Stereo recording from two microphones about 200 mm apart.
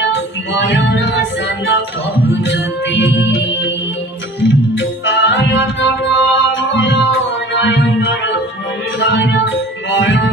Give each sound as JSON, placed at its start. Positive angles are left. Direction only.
{"t": 0.1, "sound": "music", "side_deg": 60}
{"t": 2.3, "sound": "music", "side_deg": 60}